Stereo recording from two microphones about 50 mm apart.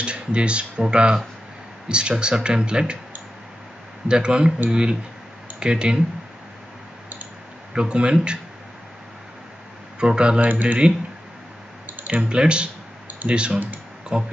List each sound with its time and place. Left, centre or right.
0.0 s speech: right
4.1 s speech: centre
7.7 s speech: centre
9.9 s speech: centre
11.8 s a sound: right
12.3 s speech: centre